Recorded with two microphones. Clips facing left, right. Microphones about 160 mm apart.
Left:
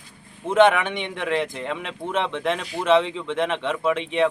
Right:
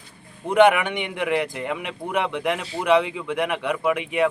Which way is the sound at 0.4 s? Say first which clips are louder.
Right 1 dB; 15° right (ahead or behind).